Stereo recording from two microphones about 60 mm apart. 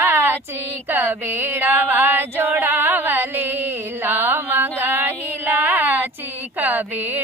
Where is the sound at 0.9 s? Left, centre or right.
Right.